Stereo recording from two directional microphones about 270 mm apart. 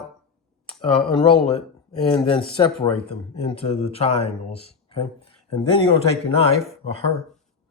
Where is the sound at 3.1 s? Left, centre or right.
Centre.